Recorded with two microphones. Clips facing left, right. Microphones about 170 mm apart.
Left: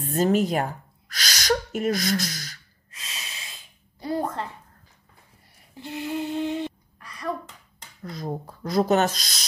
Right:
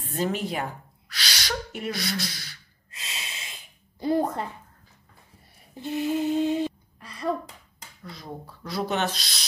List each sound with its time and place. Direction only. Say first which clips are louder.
0.0 s speech: left 6 dB; 45° left (ahead or behind)
2.9 s snort: right 1 dB; 25° right (ahead or behind)
4.0 s a woman's voice: right 3 dB; 20° right (ahead or behind)
6.0 s mantra: right 3 dB; 15° right (ahead or behind)
7.0 s a sound: right 3 dB; 25° right (ahead or behind)
8.0 s speech: left 7 dB; 45° left (ahead or behind)